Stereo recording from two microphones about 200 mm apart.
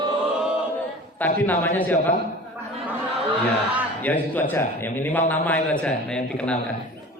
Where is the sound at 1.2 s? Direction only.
10° left (ahead or behind).